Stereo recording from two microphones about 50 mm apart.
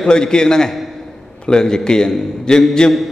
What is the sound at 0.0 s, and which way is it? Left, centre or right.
A man's voice, centre.